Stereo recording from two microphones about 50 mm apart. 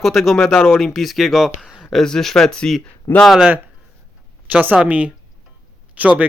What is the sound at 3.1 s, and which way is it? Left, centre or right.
Speech, left.